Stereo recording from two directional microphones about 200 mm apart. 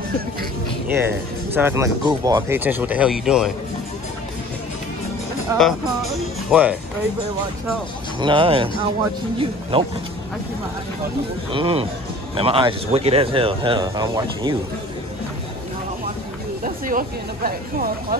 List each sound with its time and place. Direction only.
0.9 s speech: 10° right (ahead or behind)
5.5 s speech: 15° right (ahead or behind)
6.5 s speech: 5° right (ahead or behind)
8.2 s speech: 25° right (ahead or behind)
11.5 s speech: 30° right (ahead or behind)
16.6 s speech: 45° right (ahead or behind)